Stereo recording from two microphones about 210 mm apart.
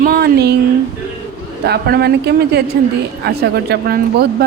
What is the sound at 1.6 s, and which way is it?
Speech, 50° right (ahead or behind).